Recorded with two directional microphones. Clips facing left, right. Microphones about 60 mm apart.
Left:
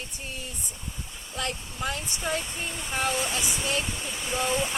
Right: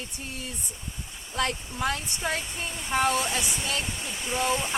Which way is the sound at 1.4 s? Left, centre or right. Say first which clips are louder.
Right 4 dB; right.